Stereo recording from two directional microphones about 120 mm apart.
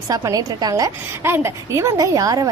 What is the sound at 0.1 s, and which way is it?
A woman's voice, 30° right (ahead or behind).